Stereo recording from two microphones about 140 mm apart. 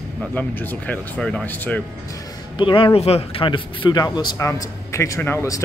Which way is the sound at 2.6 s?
35° left (ahead or behind).